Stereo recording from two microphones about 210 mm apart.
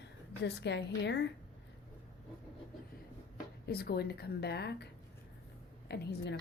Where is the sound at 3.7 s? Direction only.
50° left (ahead or behind).